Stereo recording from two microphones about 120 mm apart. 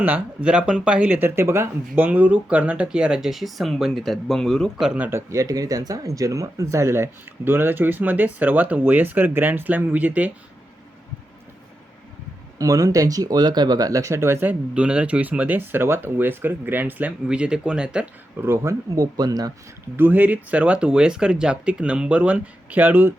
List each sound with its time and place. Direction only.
0.0 s speech: 10° right (ahead or behind)
5.3 s speech: 30° right (ahead or behind); by 10.3 s 15° right (ahead or behind)
12.5 s speech: 30° right (ahead or behind)
14.7 s speech: 10° right (ahead or behind)
18.3 s speech: 20° right (ahead or behind)
20.0 s speech: 15° right (ahead or behind)